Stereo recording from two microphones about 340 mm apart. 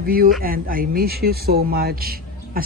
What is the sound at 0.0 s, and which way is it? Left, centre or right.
Speech, right.